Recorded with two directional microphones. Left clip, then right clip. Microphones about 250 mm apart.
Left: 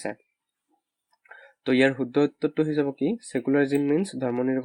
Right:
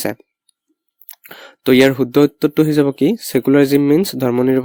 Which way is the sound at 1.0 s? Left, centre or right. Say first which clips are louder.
Right 11 dB; right.